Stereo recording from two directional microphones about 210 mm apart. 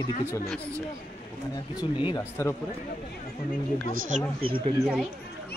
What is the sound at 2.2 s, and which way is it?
Speech, 10° left (ahead or behind).